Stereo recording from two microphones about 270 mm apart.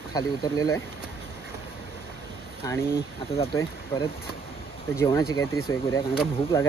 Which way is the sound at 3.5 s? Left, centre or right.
Centre.